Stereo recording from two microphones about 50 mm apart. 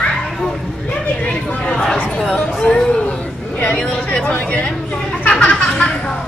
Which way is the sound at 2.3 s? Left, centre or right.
Centre.